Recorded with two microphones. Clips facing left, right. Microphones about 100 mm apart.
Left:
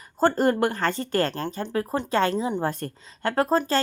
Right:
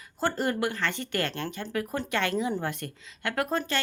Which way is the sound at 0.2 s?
45° left (ahead or behind).